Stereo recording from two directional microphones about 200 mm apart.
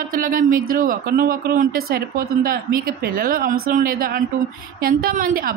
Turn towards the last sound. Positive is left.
turn(degrees=-45)  # may be behind; listen again after turning